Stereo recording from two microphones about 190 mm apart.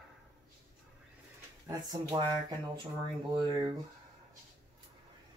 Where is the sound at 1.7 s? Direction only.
20° right (ahead or behind).